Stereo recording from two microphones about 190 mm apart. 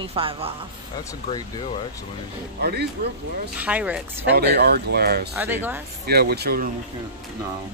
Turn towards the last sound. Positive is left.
turn(degrees=-55)  # may be behind; listen again after turning